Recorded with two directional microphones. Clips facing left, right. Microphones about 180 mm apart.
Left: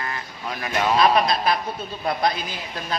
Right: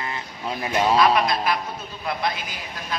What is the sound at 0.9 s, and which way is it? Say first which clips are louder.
Speech: left 3 dB; 30° left (ahead or behind).